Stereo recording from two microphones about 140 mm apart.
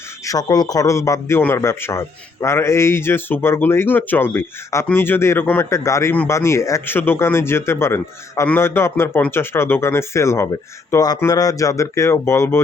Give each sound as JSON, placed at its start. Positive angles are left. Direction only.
{"t": 0.3, "sound": "a man's voice", "side_deg": 25}